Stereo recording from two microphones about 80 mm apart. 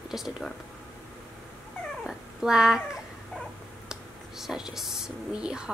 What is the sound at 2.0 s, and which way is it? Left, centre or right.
A child's voice, centre.